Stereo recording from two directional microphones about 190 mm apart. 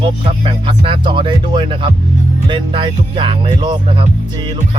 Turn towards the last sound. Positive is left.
turn(degrees=-25)  # may be behind; listen again after turning